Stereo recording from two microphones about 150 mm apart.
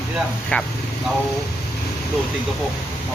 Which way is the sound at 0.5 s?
10° left (ahead or behind).